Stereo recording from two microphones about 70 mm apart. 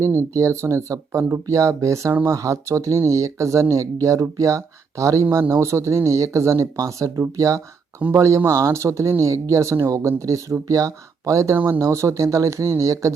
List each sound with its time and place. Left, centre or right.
0.0 s speech: right
11.5 s speech: right
11.8 s speech: right